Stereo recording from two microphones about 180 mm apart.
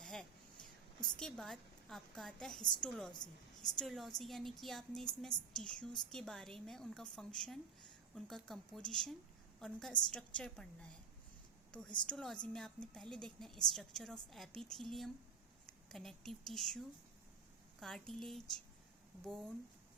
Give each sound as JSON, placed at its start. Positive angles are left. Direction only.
{"t": 0.0, "sound": "a woman's voice", "side_deg": 5}